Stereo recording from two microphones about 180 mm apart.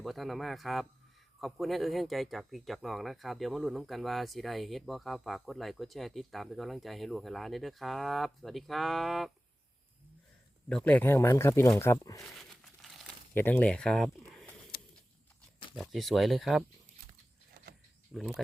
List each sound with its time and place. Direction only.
0.0 s speech: centre (ahead or behind)
10.7 s speech: 5° left (ahead or behind)
12.2 s a sound: centre (ahead or behind)
13.3 s speech: 10° left (ahead or behind)
14.7 s a sound: 55° left (ahead or behind)
15.7 s speech: centre (ahead or behind)
18.1 s speech: centre (ahead or behind)